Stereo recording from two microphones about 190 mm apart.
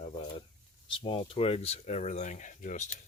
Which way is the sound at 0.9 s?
25° left (ahead or behind).